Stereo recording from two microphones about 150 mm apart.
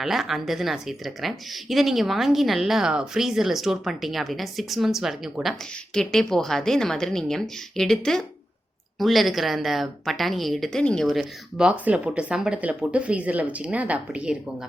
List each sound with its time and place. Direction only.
0.0 s a woman's voice: centre (ahead or behind)